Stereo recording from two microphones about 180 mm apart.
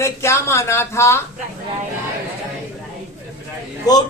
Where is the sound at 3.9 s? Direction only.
20° left (ahead or behind).